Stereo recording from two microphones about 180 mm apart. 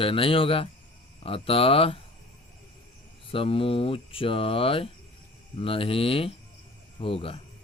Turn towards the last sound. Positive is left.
turn(degrees=30)  # may be behind; listen again after turning